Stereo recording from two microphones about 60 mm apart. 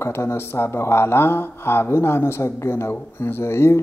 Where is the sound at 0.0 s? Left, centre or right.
Left.